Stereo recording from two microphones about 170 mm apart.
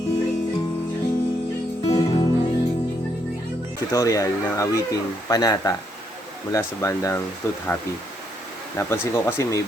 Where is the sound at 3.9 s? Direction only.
20° left (ahead or behind).